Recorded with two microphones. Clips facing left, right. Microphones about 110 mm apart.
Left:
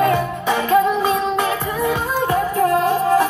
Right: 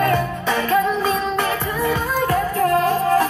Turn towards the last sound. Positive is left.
turn(degrees=15)  # may be behind; listen again after turning